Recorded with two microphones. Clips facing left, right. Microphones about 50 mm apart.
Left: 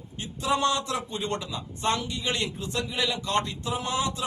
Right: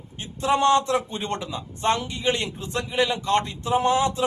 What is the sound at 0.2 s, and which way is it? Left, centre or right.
A man's voice, right.